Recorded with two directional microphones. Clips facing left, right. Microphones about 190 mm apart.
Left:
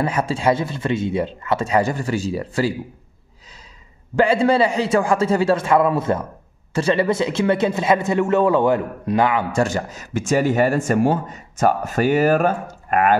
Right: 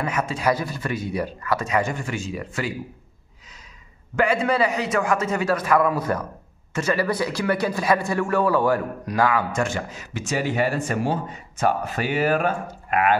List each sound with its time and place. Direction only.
0.0 s a man's voice: 30° left (ahead or behind)
4.1 s a man's voice: 30° left (ahead or behind)
9.5 s speech: 40° left (ahead or behind)